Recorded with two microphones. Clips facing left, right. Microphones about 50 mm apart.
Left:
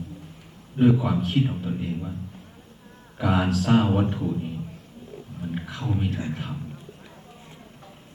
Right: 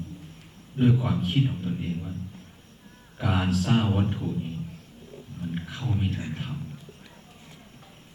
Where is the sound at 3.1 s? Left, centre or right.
Centre.